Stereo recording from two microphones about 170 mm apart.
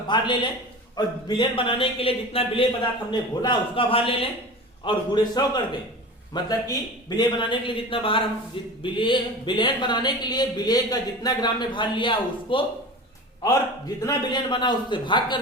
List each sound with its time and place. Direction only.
0.1 s speech: 25° left (ahead or behind)